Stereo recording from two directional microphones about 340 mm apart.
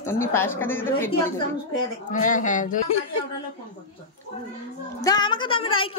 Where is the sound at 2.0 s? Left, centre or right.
Left.